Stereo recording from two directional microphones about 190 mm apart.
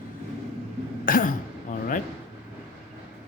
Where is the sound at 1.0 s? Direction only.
45° left (ahead or behind).